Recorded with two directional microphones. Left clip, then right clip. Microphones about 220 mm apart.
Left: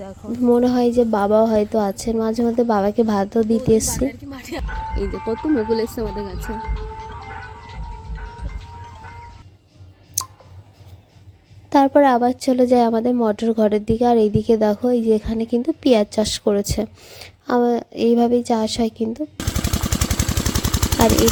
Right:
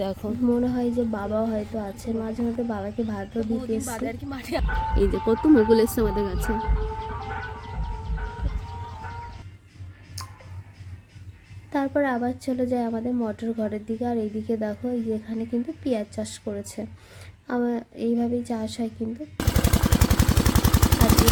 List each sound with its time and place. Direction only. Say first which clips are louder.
0.0 s speech: right 6 dB; 30° right (ahead or behind)
0.4 s a woman's voice: left 9 dB; 35° left (ahead or behind)
4.3 s speech: right 1 dB; 5° right (ahead or behind)
11.7 s a woman's voice: left 11 dB; 35° left (ahead or behind)
19.4 s machine gun: even; 10° right (ahead or behind)
19.9 s vehicle: left 1 dB; 5° left (ahead or behind)